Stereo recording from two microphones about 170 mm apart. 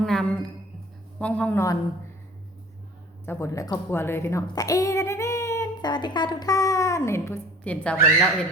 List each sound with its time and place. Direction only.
0.0 s a sound: 5° left (ahead or behind)
1.2 s a woman's voice: 10° left (ahead or behind)
3.2 s a woman's voice: 15° left (ahead or behind)